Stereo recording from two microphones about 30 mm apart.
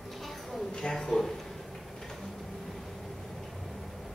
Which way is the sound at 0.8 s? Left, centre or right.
Centre.